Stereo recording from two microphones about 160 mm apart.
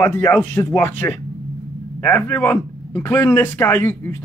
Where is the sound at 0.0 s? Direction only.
15° left (ahead or behind).